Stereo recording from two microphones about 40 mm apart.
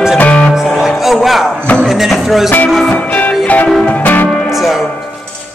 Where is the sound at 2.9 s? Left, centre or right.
Left.